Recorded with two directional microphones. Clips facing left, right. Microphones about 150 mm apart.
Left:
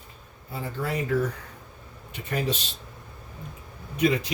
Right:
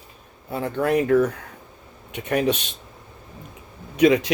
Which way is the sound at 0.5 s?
65° right (ahead or behind).